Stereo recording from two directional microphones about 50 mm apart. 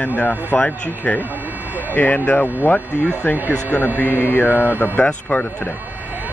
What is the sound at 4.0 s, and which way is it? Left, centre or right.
Speech, left.